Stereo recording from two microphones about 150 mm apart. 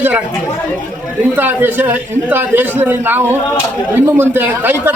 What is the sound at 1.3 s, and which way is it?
A man's voice, 15° right (ahead or behind).